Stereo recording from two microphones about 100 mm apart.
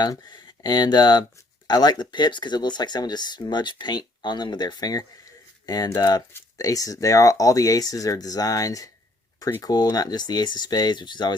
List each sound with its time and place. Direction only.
0.0 s speech: 45° left (ahead or behind)